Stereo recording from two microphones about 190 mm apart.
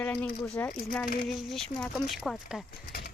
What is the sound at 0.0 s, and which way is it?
Speech, 10° left (ahead or behind).